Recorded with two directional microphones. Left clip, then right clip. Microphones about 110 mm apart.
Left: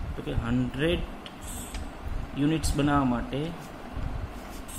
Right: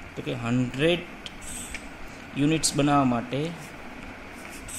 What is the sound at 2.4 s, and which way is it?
Speech, 90° right.